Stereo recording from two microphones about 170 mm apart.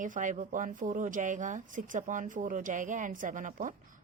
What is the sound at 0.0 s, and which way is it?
A woman's voice, 50° right (ahead or behind).